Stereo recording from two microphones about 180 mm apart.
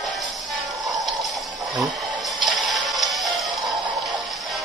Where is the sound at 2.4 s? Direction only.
Centre (ahead or behind).